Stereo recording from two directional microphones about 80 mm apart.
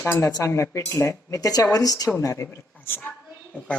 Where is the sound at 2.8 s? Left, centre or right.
Left.